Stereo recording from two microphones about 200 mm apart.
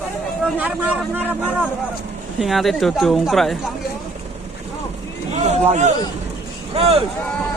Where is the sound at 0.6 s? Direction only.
10° right (ahead or behind).